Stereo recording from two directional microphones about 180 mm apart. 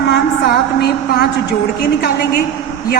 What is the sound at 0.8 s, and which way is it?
A woman's voice, 60° left (ahead or behind).